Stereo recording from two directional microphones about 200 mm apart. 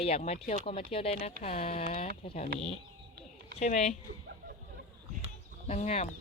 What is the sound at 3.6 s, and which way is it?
Speech, 35° left (ahead or behind).